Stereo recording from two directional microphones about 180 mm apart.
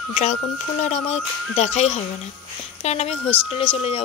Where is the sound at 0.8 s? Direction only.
40° left (ahead or behind).